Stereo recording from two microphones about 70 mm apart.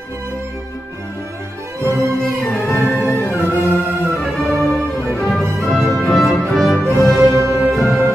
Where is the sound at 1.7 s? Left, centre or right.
Right.